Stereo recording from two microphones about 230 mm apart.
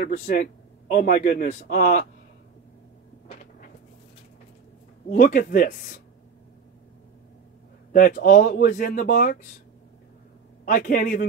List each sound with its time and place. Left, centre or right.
0.0 s a man's voice: left
5.1 s a man's voice: left
7.9 s a man's voice: left
10.6 s a man's voice: left